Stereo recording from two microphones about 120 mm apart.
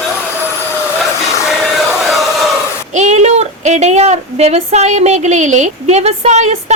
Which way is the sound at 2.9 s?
75° right (ahead or behind).